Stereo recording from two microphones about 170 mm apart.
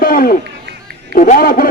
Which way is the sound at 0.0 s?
60° left (ahead or behind).